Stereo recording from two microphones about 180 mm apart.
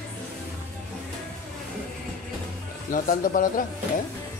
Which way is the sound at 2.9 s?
50° left (ahead or behind).